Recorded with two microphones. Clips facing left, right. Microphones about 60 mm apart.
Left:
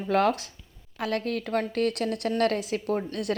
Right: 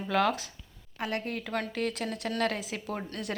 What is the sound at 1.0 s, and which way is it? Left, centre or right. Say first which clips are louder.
Speech: left 5 dB; left.